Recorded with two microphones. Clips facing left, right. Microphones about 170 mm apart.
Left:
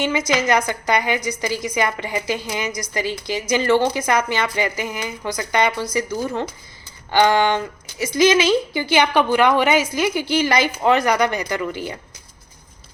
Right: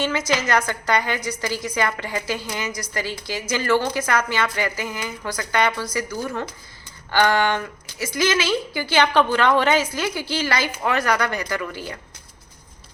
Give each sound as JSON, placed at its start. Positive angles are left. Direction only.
{"t": 0.0, "sound": "a woman's voice", "side_deg": 15}